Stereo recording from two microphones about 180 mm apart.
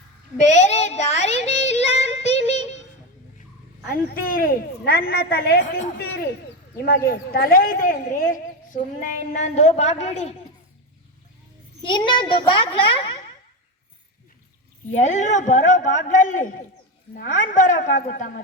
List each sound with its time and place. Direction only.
0.3 s child singing: 40° left (ahead or behind)
4.1 s a woman's voice: 50° left (ahead or behind); by 10.3 s 35° left (ahead or behind)
11.8 s a child's voice: 25° left (ahead or behind)
14.9 s speech: 40° left (ahead or behind)